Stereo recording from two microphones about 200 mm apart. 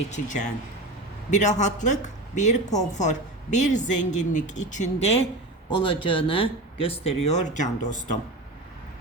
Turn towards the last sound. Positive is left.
turn(degrees=35)  # may be behind; listen again after turning